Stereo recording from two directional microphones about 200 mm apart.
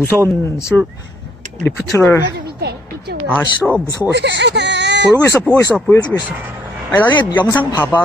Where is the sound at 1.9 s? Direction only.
15° left (ahead or behind).